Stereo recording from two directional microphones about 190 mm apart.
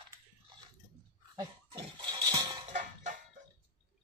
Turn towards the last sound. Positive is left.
turn(degrees=-40)  # may be behind; listen again after turning